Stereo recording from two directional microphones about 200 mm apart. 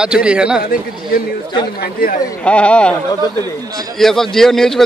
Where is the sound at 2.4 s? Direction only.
5° left (ahead or behind).